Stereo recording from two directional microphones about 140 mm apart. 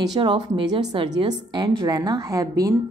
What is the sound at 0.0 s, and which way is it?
A woman's voice, 30° right (ahead or behind).